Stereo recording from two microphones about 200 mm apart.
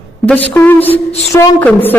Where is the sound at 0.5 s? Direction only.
10° left (ahead or behind).